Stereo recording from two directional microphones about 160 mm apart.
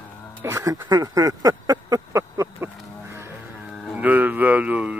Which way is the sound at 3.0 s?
15° right (ahead or behind).